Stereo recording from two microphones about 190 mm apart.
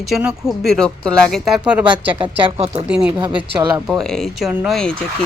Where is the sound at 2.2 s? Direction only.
30° right (ahead or behind).